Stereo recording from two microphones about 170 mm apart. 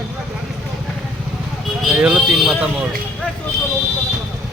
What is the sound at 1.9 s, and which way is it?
Speech, 10° right (ahead or behind).